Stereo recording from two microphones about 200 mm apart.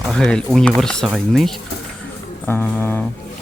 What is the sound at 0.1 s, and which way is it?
Speech, 5° left (ahead or behind).